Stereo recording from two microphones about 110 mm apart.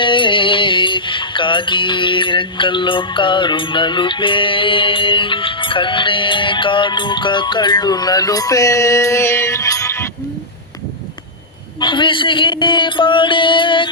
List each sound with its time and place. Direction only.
0.0 s music: 50° left (ahead or behind); by 10.1 s 25° left (ahead or behind)
11.8 s music: 45° left (ahead or behind)